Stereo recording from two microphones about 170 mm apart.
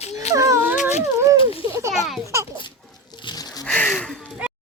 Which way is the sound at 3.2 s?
25° left (ahead or behind).